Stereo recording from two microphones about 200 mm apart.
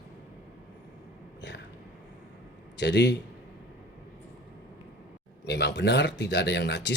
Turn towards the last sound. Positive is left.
turn(degrees=60)  # may be behind; listen again after turning